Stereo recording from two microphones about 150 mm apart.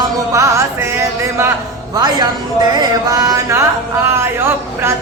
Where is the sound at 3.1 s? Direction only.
25° right (ahead or behind).